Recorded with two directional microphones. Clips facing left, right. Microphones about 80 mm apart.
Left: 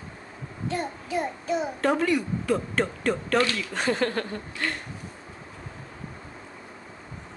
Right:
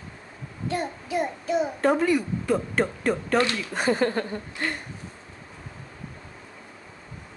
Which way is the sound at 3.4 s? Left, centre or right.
Right.